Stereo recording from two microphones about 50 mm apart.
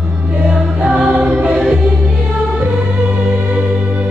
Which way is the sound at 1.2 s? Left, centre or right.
Centre.